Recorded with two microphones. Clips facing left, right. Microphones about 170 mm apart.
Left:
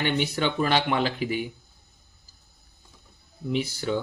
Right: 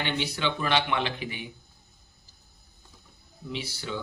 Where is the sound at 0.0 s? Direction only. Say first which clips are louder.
Left 4 dB; 45° left (ahead or behind).